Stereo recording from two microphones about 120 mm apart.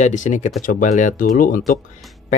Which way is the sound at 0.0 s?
90° left.